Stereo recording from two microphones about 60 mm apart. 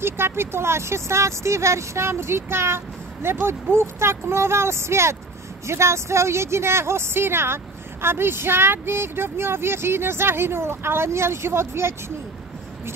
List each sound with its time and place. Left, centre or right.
0.0 s a woman's voice: right